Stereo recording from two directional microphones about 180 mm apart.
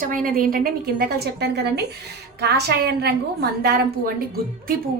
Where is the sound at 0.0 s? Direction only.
50° right (ahead or behind).